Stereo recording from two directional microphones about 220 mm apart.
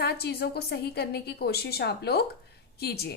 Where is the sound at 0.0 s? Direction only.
45° left (ahead or behind).